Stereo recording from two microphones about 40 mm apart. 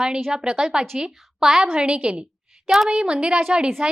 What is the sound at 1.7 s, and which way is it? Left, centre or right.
A woman's voice, right.